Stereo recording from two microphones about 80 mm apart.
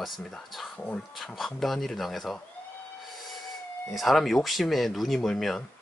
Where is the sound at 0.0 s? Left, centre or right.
Centre.